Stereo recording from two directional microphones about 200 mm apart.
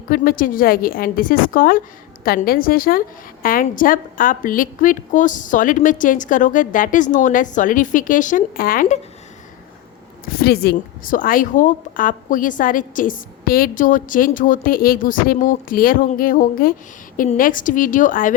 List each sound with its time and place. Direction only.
0.1 s a woman's voice: 45° left (ahead or behind)
10.2 s a woman's voice: 50° left (ahead or behind)